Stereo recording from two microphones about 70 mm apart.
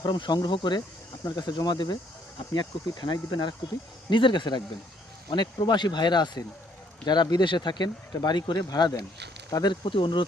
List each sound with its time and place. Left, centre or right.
0.0 s speech: left
1.2 s speech: left
9.5 s speech: left